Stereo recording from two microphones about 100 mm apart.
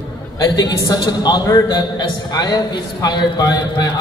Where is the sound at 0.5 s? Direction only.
45° left (ahead or behind).